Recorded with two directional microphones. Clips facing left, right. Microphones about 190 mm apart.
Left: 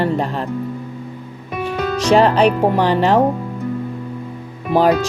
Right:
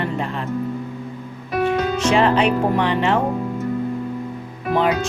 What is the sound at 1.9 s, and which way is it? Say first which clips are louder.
Speech: left 6 dB; 35° left (ahead or behind).